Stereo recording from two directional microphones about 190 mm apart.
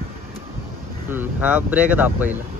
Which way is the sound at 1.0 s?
10° right (ahead or behind).